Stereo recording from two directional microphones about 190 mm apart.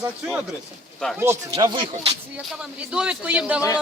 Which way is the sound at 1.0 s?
5° left (ahead or behind).